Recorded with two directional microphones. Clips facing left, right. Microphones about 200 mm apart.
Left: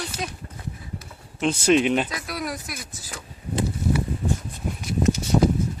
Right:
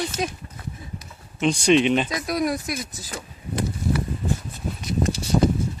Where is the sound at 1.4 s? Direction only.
5° left (ahead or behind).